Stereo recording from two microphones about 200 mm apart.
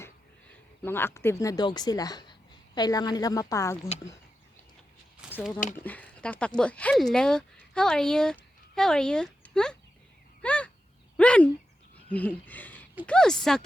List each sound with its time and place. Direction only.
0.8 s speech: 10° left (ahead or behind)
5.2 s a sound: 5° right (ahead or behind)
5.7 s speech: 10° left (ahead or behind)
10.4 s crow: 5° left (ahead or behind)
11.2 s bird: 5° left (ahead or behind)
12.0 s speech: 5° left (ahead or behind)